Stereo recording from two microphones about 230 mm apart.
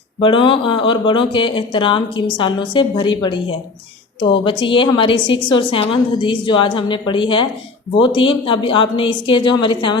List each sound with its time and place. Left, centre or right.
0.2 s a woman's voice: left